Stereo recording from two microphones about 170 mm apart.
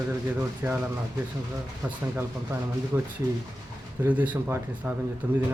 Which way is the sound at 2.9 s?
20° right (ahead or behind).